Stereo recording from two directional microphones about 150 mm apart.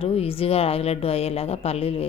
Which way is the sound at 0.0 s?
40° left (ahead or behind).